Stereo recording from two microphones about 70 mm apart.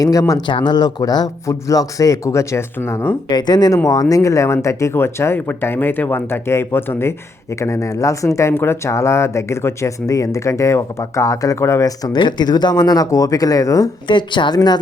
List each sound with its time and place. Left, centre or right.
0.0 s speech: left
0.6 s speech: left
1.5 s speech: left
3.2 s speech: left
3.8 s speech: left
7.6 s speech: left
8.5 s speech: left
11.9 s speech: left
14.2 s speech: left